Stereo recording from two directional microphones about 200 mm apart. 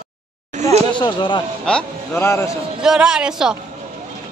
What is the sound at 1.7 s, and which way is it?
Speech, 5° left (ahead or behind).